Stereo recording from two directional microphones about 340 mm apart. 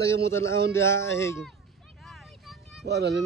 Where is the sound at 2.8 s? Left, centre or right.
Right.